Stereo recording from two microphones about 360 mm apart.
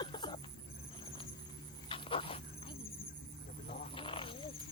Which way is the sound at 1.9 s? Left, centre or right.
Centre.